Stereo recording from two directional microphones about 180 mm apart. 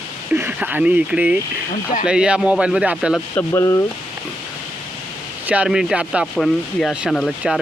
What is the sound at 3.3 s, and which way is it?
Speech, 15° left (ahead or behind).